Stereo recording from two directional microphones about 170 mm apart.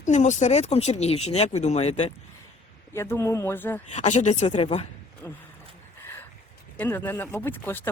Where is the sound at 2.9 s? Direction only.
15° left (ahead or behind).